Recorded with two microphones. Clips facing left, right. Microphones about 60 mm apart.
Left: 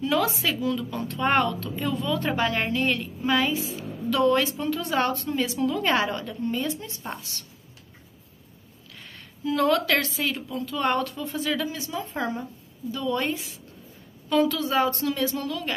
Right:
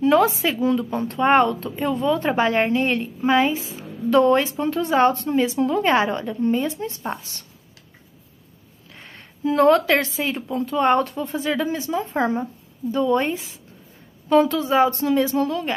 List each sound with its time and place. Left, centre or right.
0.0 s speech: right
8.9 s a sound: right
10.3 s speech: right